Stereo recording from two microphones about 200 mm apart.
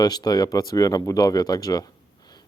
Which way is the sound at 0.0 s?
20° left (ahead or behind).